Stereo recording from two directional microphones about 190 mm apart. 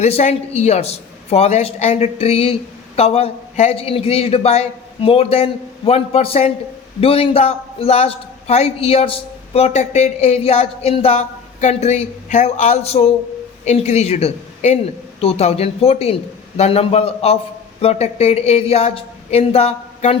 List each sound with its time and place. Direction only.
0.0 s a woman's voice: 35° left (ahead or behind)